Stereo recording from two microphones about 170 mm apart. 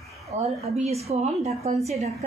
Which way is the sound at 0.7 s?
40° right (ahead or behind).